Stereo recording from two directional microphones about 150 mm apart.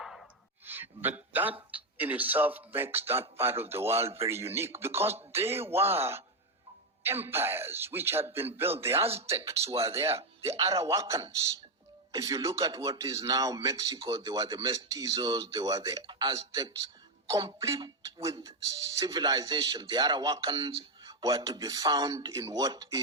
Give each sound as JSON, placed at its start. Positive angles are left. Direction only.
{"t": 0.0, "sound": "a sound", "side_deg": 0}
{"t": 0.6, "sound": "a sound", "side_deg": -15}
{"t": 1.7, "sound": "a man's voice", "side_deg": -10}
{"t": 9.9, "sound": "speech", "side_deg": -40}
{"t": 10.5, "sound": "speech", "side_deg": -20}
{"t": 17.7, "sound": "speech", "side_deg": -25}